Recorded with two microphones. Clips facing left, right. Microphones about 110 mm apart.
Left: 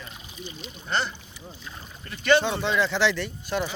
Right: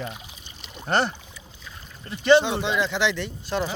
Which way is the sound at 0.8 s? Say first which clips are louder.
Right 5 dB; 55° right (ahead or behind).